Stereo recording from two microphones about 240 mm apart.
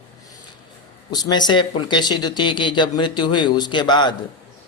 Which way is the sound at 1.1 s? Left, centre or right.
Centre.